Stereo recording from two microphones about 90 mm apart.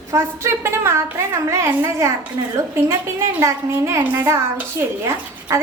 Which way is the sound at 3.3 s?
30° right (ahead or behind).